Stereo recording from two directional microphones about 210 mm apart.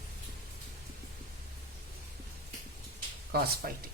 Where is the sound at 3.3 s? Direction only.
45° right (ahead or behind).